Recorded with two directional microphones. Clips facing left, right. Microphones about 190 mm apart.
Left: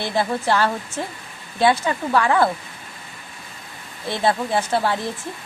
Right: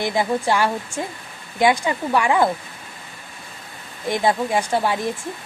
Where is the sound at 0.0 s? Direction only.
15° right (ahead or behind).